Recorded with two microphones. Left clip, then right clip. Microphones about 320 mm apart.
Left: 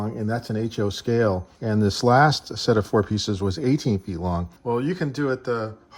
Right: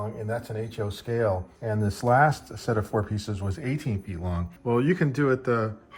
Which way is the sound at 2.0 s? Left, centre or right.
Right.